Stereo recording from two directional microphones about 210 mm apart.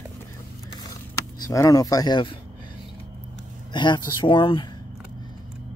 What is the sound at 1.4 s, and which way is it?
Speech, 15° left (ahead or behind).